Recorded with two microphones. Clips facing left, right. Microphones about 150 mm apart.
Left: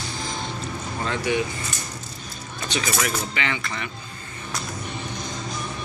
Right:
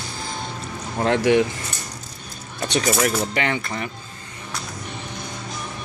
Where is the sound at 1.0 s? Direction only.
70° right (ahead or behind).